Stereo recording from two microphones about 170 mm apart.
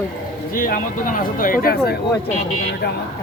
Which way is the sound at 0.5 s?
55° left (ahead or behind).